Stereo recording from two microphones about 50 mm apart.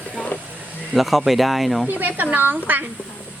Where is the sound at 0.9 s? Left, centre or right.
Centre.